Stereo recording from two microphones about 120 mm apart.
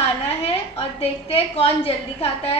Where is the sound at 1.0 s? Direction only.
55° left (ahead or behind).